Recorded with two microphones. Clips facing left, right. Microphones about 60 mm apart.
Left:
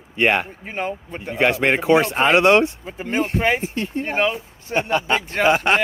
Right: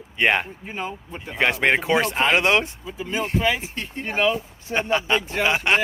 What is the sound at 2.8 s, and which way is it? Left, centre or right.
Speech, left.